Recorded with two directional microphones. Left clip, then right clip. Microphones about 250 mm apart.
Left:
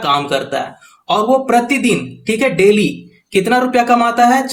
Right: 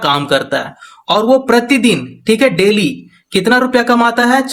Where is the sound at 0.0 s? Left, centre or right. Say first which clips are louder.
Right 2 dB; right.